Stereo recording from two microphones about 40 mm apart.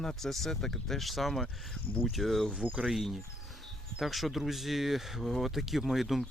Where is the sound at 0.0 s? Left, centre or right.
Centre.